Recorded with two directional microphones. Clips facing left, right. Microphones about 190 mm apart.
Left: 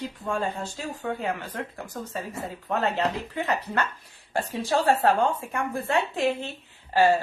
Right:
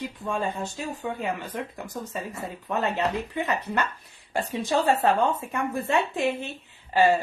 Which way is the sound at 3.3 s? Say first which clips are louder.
Even; 15° right (ahead or behind).